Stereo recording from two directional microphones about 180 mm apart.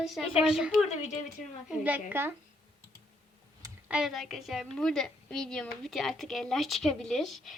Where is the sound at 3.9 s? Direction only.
Centre (ahead or behind).